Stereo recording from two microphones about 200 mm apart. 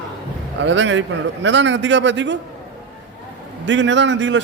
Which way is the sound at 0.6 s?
65° right (ahead or behind).